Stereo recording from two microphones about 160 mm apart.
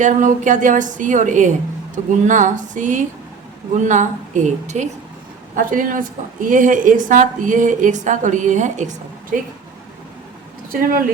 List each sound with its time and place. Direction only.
0.0 s a woman's voice: 50° right (ahead or behind)
5.5 s a woman's voice: 55° right (ahead or behind)
10.7 s speech: 65° right (ahead or behind)